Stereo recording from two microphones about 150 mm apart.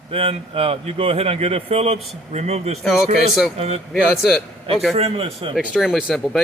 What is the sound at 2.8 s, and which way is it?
Speech, centre (ahead or behind).